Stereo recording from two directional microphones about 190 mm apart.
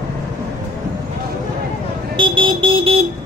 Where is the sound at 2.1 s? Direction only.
25° right (ahead or behind).